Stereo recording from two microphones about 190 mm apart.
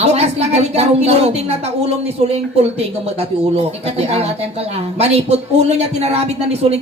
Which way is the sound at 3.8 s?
35° right (ahead or behind).